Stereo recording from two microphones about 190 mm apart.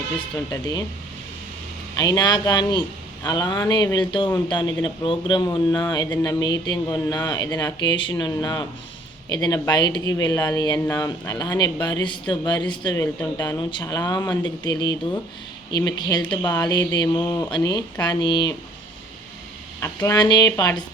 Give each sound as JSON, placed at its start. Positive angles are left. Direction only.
{"t": 0.5, "sound": "speech", "side_deg": 20}
{"t": 2.0, "sound": "speech", "side_deg": 20}
{"t": 13.4, "sound": "speech", "side_deg": 25}
{"t": 19.8, "sound": "speech", "side_deg": 15}